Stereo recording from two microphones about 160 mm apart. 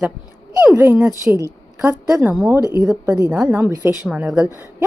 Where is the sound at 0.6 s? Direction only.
10° right (ahead or behind).